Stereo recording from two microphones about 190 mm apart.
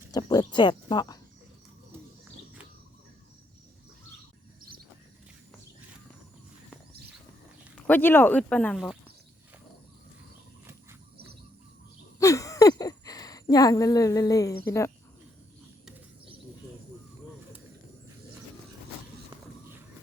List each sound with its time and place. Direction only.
0.1 s speech: 20° left (ahead or behind)
7.8 s speech: 10° left (ahead or behind)
12.2 s a sound: 15° left (ahead or behind)